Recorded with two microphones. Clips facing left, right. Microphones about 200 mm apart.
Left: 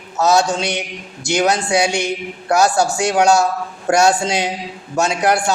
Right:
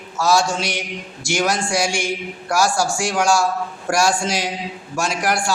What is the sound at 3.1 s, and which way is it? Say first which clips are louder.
A man's voice: left 4 dB; 20° left (ahead or behind).